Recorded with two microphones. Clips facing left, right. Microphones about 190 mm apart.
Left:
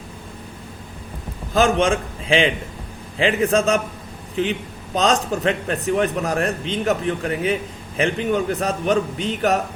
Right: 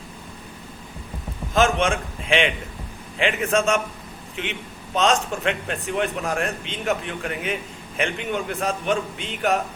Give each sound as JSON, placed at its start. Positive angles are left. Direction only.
{"t": 1.5, "sound": "a man's voice", "side_deg": 35}